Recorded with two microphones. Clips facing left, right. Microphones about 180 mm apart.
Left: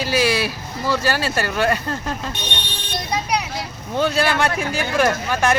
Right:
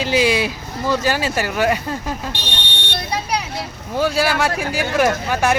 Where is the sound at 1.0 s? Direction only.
15° right (ahead or behind).